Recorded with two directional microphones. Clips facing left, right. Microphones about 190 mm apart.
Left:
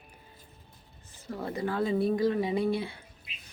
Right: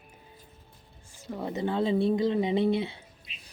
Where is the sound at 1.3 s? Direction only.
10° right (ahead or behind).